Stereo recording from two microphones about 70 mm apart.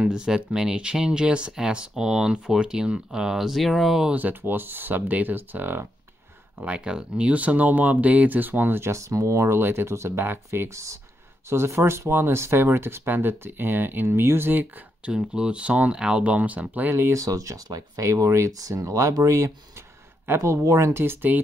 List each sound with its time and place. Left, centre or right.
0.0 s speech: centre
4.1 s speech: right
6.6 s speech: centre; by 14.7 s right
15.0 s speech: centre
16.9 s speech: right
17.2 s speech: right
17.6 s speech: right
18.0 s speech: right
20.6 s speech: right
21.0 s speech: right